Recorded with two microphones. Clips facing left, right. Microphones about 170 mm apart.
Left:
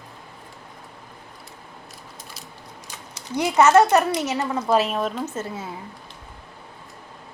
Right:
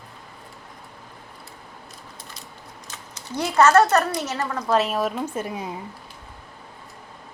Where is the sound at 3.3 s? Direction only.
15° left (ahead or behind).